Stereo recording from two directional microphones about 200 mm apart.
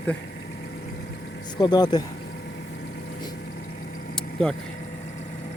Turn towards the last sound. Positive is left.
turn(degrees=5)  # may be behind; listen again after turning